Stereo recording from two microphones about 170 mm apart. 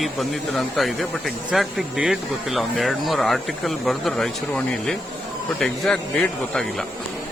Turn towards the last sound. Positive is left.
turn(degrees=5)  # may be behind; listen again after turning